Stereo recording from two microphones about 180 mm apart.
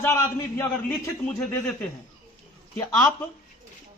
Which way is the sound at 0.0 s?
15° left (ahead or behind).